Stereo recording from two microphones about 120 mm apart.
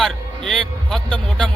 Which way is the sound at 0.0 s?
5° left (ahead or behind).